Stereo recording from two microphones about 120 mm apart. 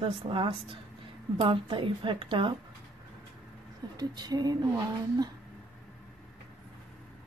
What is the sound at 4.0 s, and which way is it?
Speech, 35° right (ahead or behind).